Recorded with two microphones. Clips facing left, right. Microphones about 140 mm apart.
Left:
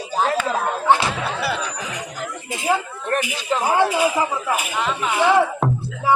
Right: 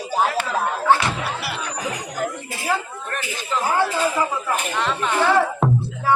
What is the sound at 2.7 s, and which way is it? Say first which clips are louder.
Speech: left 4 dB; 15° left (ahead or behind).